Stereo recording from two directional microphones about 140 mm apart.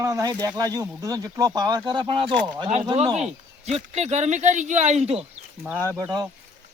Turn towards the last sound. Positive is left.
turn(degrees=-25)  # may be behind; listen again after turning